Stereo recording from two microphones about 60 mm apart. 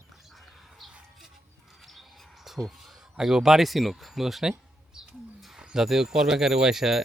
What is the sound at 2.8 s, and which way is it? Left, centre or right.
Speech, centre.